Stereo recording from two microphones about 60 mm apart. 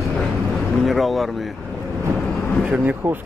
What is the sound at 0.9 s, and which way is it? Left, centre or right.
Vehicle, centre.